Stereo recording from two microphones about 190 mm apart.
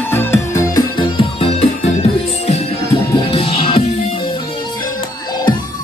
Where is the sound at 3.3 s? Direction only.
30° left (ahead or behind).